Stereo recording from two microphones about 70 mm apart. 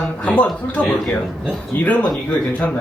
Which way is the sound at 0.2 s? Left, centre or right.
Centre.